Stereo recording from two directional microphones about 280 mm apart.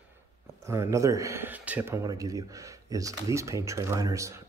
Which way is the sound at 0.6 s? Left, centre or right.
Centre.